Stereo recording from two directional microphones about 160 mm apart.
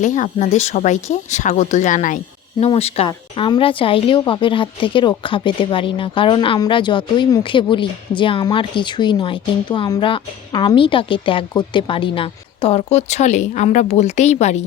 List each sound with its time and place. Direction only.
0.0 s speech: 50° left (ahead or behind)
2.6 s speech: 40° left (ahead or behind)